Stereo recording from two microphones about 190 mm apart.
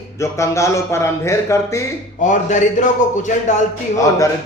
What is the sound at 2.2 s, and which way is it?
A man's voice, 40° left (ahead or behind).